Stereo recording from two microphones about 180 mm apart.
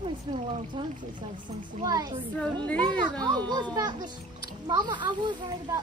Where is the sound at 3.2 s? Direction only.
20° right (ahead or behind).